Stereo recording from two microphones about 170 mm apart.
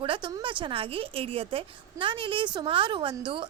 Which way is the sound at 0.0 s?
30° right (ahead or behind).